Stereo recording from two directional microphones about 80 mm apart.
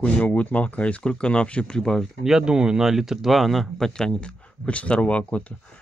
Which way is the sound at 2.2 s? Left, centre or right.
Centre.